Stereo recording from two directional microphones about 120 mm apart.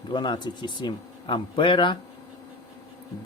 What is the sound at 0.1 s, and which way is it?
Speech, 40° left (ahead or behind).